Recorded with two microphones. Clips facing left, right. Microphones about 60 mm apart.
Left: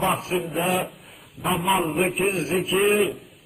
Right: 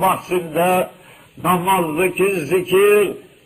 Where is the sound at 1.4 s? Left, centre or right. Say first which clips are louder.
Right 8 dB; right.